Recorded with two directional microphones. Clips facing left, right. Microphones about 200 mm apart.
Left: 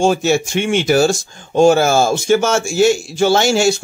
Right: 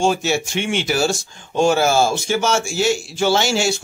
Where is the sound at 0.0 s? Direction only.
45° left (ahead or behind).